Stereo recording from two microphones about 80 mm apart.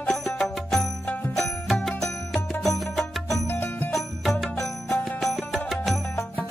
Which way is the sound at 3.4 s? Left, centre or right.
Left.